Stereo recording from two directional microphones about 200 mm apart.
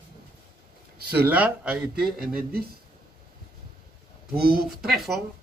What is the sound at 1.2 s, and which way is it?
Speech, 5° right (ahead or behind).